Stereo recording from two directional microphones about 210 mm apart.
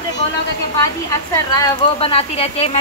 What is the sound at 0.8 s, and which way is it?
Speech, 15° left (ahead or behind).